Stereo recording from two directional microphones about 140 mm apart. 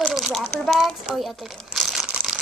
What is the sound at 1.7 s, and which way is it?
Crumpling, centre (ahead or behind).